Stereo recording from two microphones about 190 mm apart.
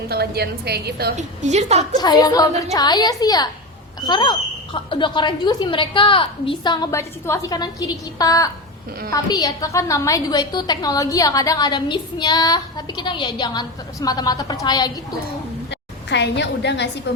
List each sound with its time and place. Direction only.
0.1 s a woman's voice: 55° right (ahead or behind)
1.1 s a woman's voice: 35° right (ahead or behind)
2.0 s a woman's voice: 20° left (ahead or behind)
15.7 s a woman's voice: 65° left (ahead or behind)